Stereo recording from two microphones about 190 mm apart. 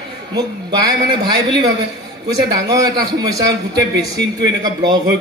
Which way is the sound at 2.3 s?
20° right (ahead or behind).